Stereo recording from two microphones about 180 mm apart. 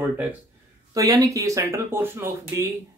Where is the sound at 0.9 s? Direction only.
20° right (ahead or behind).